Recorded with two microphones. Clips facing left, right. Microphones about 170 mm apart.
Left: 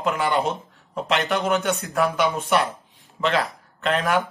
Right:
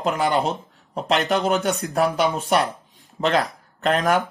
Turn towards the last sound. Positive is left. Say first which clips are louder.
# right 2 dB
turn(degrees=-40)  # may be behind; listen again after turning